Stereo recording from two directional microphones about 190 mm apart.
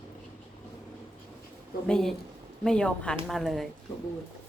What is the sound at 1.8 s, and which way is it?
A woman's voice, 5° left (ahead or behind).